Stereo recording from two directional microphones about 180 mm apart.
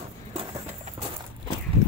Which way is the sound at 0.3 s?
35° right (ahead or behind).